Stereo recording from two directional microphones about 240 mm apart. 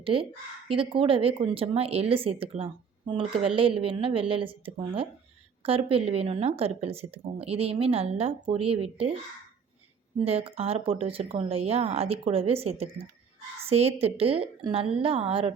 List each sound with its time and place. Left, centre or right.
0.0 s speech: right
10.2 s speech: right